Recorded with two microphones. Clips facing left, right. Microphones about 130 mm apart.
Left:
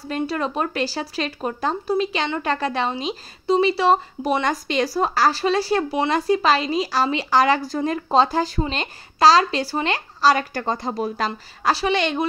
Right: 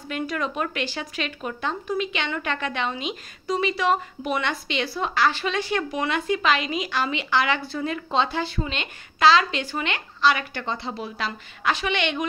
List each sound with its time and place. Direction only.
0.1 s speech: 35° left (ahead or behind)